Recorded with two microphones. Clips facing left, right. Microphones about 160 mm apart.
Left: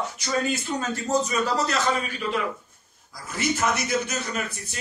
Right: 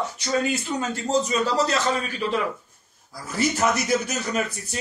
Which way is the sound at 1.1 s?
25° right (ahead or behind).